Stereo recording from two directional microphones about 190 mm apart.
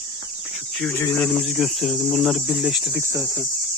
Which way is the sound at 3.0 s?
15° right (ahead or behind).